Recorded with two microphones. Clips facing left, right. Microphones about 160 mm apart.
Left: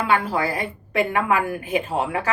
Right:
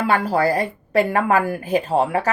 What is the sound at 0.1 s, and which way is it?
A woman's voice, 40° right (ahead or behind).